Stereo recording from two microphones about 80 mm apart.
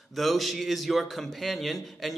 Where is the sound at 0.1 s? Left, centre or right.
Centre.